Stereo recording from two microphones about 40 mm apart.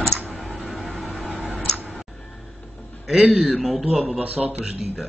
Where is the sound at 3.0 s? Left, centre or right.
Centre.